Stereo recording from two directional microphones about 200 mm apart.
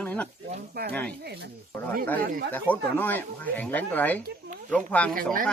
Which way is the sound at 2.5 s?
10° left (ahead or behind).